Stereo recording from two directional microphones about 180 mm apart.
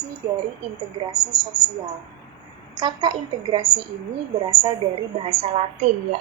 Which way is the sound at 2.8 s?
25° right (ahead or behind).